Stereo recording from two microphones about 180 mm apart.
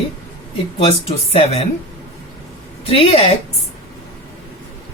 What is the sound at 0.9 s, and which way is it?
Speech, 35° left (ahead or behind).